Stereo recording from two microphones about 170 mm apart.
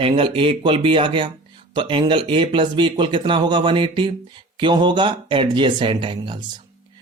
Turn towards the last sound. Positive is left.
turn(degrees=-30)  # may be behind; listen again after turning